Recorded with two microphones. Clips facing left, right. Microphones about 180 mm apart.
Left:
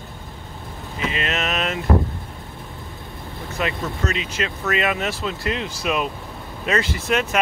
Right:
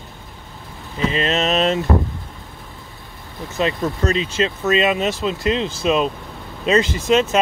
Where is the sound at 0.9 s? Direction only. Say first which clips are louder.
Right 6 dB; 35° right (ahead or behind).